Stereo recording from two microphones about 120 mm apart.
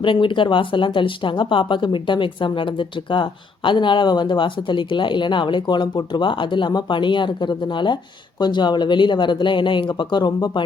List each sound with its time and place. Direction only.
0.0 s speech: 45° left (ahead or behind)